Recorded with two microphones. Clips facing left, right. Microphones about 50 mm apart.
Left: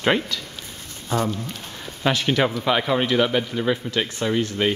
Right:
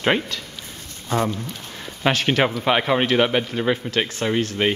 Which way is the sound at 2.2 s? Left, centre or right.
Right.